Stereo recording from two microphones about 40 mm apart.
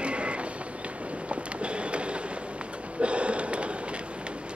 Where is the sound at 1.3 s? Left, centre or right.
Right.